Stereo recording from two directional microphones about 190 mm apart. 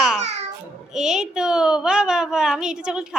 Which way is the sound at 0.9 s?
5° right (ahead or behind).